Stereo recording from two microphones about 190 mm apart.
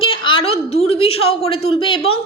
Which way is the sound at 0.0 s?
30° left (ahead or behind).